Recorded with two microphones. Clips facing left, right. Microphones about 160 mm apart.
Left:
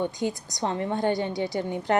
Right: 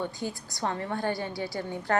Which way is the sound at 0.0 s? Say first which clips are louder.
Left 6 dB; 20° left (ahead or behind).